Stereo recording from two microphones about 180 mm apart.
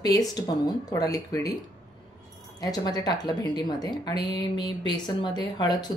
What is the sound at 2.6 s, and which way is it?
Speech, 20° left (ahead or behind).